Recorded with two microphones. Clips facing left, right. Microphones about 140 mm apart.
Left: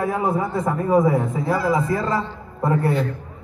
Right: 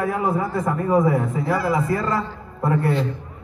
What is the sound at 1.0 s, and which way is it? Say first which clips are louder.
A man's voice: left 1 dB; 40° left (ahead or behind).